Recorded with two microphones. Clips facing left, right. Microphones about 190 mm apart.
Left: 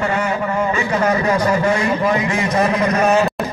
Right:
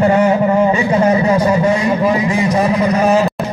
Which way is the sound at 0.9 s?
25° right (ahead or behind).